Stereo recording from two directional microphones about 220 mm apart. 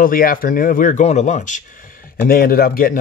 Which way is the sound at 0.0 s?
40° left (ahead or behind).